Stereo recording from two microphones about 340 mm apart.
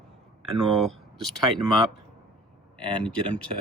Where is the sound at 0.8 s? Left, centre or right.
Centre.